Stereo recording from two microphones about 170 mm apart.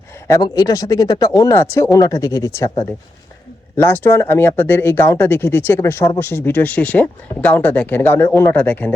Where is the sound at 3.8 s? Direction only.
10° left (ahead or behind).